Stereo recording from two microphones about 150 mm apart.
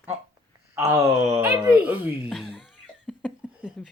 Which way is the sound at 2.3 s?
Centre (ahead or behind).